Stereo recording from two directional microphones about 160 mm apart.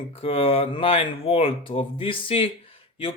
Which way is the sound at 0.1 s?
35° left (ahead or behind).